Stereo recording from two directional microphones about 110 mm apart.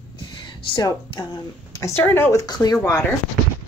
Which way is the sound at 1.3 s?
30° left (ahead or behind).